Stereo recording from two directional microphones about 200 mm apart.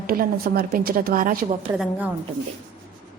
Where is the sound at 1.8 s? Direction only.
5° right (ahead or behind).